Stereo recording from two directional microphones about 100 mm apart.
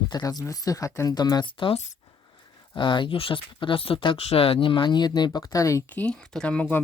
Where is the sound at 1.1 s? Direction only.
45° left (ahead or behind).